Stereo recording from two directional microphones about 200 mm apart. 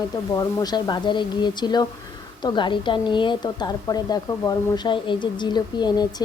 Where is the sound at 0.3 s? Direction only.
20° left (ahead or behind).